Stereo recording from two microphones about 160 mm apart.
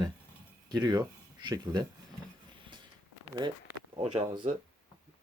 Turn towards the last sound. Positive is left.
turn(degrees=-30)  # may be behind; listen again after turning